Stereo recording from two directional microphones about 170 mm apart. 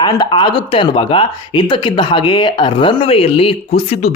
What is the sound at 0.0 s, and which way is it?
Speech, 25° left (ahead or behind).